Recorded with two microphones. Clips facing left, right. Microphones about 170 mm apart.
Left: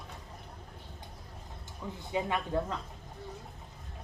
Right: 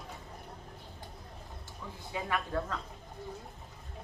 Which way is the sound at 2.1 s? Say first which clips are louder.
Left 3 dB; 20° left (ahead or behind).